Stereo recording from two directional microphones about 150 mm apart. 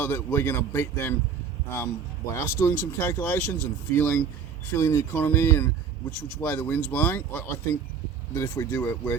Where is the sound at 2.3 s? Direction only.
20° left (ahead or behind).